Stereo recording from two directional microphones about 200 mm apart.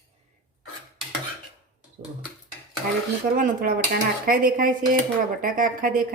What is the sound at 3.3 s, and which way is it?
Speech, 45° right (ahead or behind).